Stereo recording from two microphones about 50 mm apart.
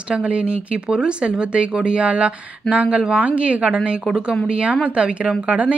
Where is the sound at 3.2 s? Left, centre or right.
Right.